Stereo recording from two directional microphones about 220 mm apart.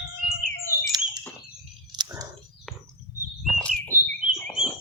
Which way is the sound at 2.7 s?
Centre (ahead or behind).